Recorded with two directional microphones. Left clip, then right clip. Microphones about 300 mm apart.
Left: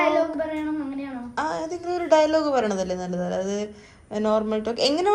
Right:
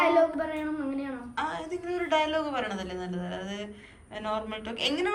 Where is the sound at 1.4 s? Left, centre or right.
Centre.